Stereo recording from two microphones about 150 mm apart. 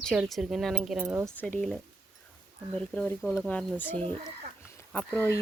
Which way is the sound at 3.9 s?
35° right (ahead or behind).